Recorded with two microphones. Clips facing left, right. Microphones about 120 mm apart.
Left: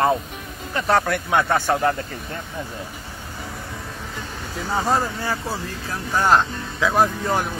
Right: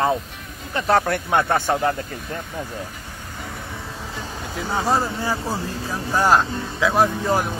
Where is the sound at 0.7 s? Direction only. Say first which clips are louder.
Right 1 dB; 30° right (ahead or behind).